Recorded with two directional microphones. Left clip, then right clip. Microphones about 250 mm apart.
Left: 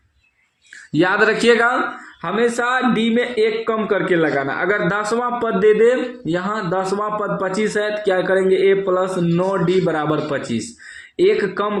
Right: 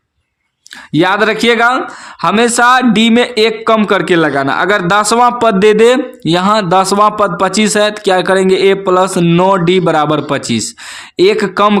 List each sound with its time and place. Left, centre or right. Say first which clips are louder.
0.9 s a man's voice: right 5 dB; right
2.2 s a man's voice: right 10 dB; right